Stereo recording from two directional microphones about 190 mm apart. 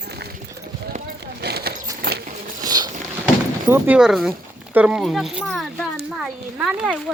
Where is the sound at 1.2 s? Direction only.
60° right (ahead or behind).